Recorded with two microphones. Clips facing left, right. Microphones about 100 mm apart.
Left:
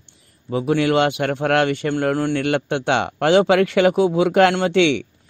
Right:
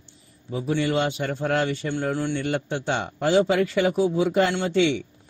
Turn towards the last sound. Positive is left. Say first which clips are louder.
# left 5 dB
turn(degrees=75)  # may be behind; listen again after turning